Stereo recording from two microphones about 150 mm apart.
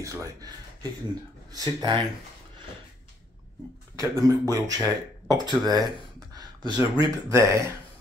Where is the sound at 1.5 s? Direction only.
25° right (ahead or behind).